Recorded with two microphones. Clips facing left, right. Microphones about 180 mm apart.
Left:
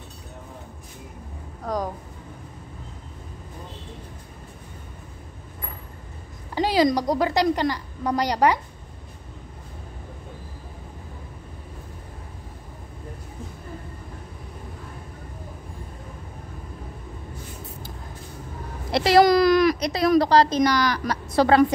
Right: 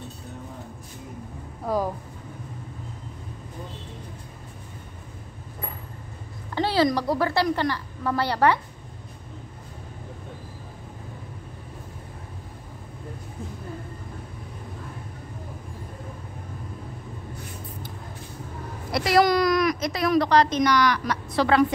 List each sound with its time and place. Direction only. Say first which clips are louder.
6.5 s a woman's voice: left 2 dB; 15° left (ahead or behind)
18.9 s a sound: left 4 dB; 25° left (ahead or behind)
19.9 s a woman's voice: left 3 dB; 35° left (ahead or behind)